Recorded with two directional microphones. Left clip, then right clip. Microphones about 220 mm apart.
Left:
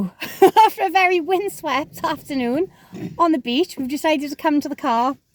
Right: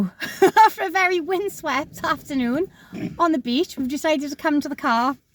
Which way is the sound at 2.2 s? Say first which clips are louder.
Left 2 dB; 20° left (ahead or behind).